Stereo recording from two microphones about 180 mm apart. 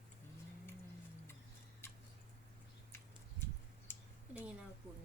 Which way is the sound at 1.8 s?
15° left (ahead or behind).